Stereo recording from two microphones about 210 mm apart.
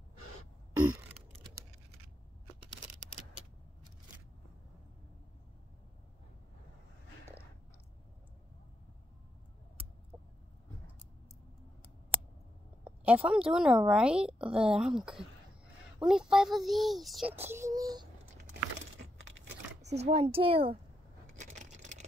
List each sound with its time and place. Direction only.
12.8 s a woman's voice: 5° right (ahead or behind)
17.4 s child singing: 10° right (ahead or behind)
19.8 s speech: 30° right (ahead or behind)
21.4 s coin: 35° right (ahead or behind)